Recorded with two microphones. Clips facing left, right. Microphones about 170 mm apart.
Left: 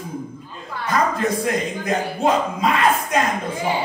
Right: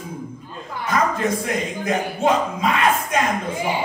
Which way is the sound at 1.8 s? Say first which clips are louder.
Right 1 dB; 35° left (ahead or behind).